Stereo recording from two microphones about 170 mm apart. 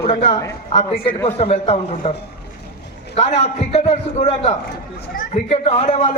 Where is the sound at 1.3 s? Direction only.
40° left (ahead or behind).